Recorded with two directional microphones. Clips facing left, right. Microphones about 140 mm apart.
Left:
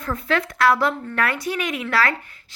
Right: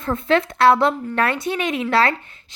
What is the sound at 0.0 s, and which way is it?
A woman's voice, 25° right (ahead or behind).